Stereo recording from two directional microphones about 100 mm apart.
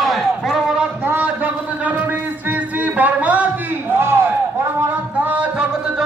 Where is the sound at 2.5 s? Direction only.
15° right (ahead or behind).